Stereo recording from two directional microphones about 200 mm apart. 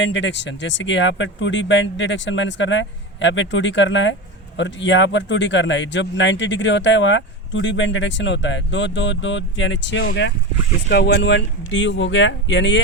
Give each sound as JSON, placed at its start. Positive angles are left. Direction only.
{"t": 0.0, "sound": "speech", "side_deg": 65}